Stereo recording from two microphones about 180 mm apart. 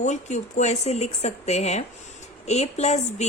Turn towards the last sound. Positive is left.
turn(degrees=35)  # may be behind; listen again after turning